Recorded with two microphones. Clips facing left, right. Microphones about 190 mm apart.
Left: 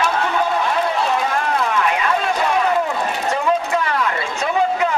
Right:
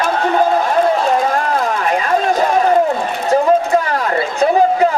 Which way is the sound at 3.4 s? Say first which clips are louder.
Right 6 dB; 35° right (ahead or behind).